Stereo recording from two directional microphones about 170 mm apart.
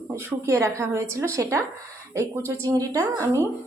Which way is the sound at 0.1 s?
15° right (ahead or behind).